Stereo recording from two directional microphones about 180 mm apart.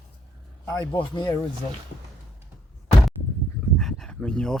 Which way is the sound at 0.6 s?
15° left (ahead or behind).